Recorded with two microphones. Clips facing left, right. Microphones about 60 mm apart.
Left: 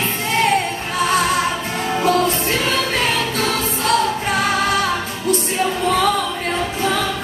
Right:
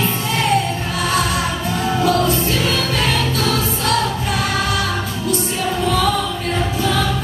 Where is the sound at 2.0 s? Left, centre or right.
Left.